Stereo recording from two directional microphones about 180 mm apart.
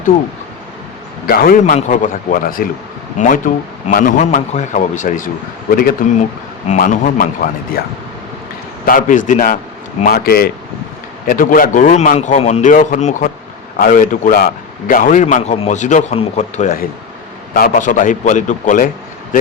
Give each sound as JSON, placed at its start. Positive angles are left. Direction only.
{"t": 1.3, "sound": "a man's voice", "side_deg": 55}
{"t": 8.9, "sound": "a man's voice", "side_deg": 45}
{"t": 10.1, "sound": "a man's voice", "side_deg": 60}